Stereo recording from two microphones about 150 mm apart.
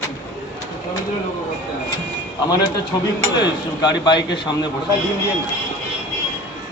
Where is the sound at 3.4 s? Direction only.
30° left (ahead or behind).